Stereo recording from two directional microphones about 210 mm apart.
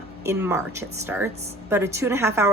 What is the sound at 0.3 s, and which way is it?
A woman's voice, 10° right (ahead or behind).